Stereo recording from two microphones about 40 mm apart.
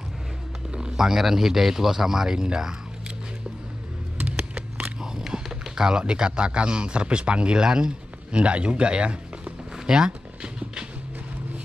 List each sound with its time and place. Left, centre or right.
0.7 s a man's voice: right
4.8 s speech: centre